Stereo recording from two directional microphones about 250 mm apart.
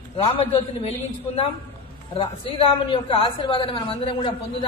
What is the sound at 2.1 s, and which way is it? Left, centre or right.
A man's voice, left.